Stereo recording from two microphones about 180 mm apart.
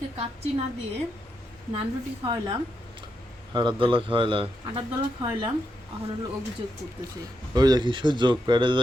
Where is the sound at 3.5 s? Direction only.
25° right (ahead or behind).